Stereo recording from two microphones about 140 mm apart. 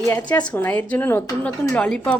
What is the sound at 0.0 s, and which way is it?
Speech, 20° left (ahead or behind).